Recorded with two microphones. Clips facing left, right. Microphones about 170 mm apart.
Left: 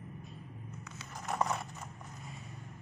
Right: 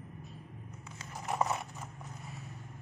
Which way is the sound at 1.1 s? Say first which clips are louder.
Right 1 dB; 5° right (ahead or behind).